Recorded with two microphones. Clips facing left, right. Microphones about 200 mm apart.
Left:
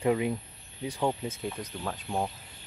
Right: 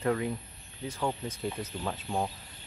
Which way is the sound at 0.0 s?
15° left (ahead or behind).